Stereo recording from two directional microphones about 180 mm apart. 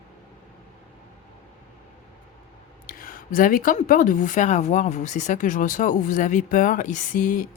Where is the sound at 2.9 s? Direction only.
50° left (ahead or behind).